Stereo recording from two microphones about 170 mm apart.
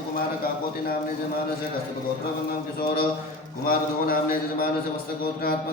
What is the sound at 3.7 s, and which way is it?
Speech, 55° left (ahead or behind).